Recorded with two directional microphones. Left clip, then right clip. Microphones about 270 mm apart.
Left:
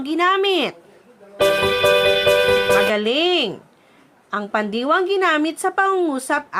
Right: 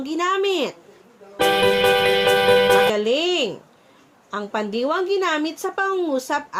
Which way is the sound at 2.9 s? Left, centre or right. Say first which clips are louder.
Left 2 dB; left.